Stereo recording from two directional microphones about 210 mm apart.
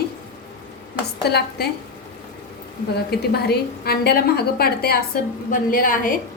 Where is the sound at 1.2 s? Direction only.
50° left (ahead or behind).